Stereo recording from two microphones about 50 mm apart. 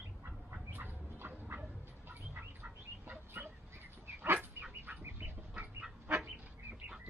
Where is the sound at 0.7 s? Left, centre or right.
Right.